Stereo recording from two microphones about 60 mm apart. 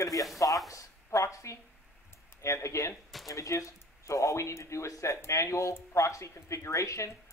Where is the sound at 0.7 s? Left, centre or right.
Left.